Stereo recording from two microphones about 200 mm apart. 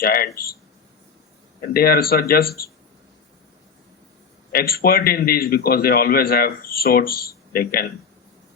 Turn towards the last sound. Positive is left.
turn(degrees=50)  # may be behind; listen again after turning